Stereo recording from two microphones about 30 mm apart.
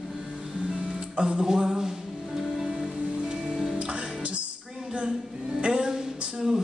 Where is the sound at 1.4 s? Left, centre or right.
Right.